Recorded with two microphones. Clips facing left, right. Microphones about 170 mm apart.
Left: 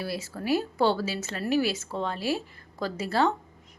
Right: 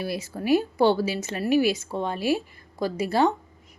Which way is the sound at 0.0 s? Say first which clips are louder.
Right 3 dB; 15° right (ahead or behind).